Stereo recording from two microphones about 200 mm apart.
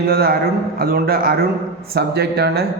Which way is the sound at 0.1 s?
50° right (ahead or behind).